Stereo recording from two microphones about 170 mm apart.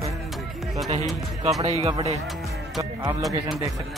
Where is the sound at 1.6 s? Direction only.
35° right (ahead or behind).